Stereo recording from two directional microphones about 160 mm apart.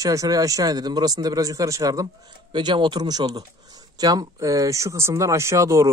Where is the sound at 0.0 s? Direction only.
20° right (ahead or behind).